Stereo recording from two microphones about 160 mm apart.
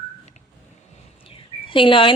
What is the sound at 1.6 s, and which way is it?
Speech, 30° left (ahead or behind).